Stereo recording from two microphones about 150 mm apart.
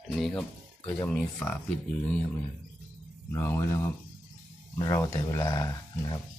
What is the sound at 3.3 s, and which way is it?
Speech, 15° left (ahead or behind).